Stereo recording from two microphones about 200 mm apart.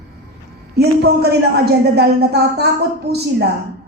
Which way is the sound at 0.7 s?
55° right (ahead or behind).